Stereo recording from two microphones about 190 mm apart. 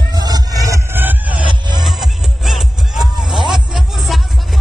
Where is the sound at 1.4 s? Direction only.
25° right (ahead or behind).